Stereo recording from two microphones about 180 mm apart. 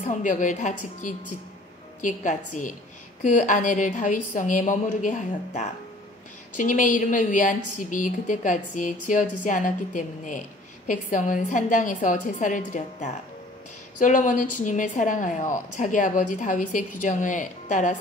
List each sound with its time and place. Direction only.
0.0 s a woman's voice: 45° left (ahead or behind)